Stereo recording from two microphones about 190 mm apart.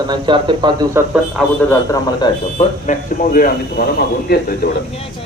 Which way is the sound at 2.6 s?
45° left (ahead or behind).